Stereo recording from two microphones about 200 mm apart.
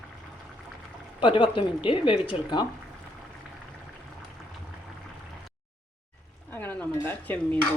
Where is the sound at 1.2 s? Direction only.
25° left (ahead or behind).